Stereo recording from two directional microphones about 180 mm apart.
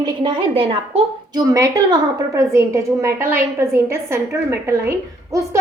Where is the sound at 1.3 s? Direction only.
20° right (ahead or behind).